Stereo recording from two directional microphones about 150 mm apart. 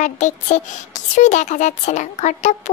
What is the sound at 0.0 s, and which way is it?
A child's voice, 50° left (ahead or behind).